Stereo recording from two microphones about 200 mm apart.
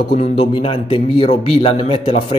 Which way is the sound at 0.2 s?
30° left (ahead or behind).